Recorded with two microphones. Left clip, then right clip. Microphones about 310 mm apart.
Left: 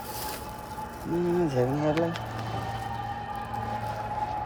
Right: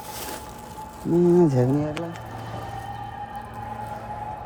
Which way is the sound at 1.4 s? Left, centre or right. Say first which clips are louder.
Right 6 dB; right.